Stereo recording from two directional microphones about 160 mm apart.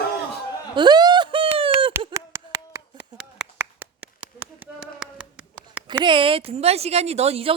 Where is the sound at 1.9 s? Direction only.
20° right (ahead or behind).